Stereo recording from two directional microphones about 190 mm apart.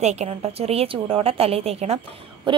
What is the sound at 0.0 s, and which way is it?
A woman's voice, 35° right (ahead or behind).